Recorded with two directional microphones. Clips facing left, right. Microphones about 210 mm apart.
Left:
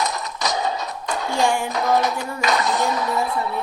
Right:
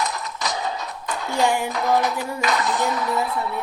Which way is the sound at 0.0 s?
40° left (ahead or behind).